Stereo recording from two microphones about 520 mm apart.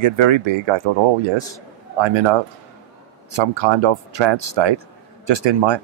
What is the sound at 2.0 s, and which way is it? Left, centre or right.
Speech, right.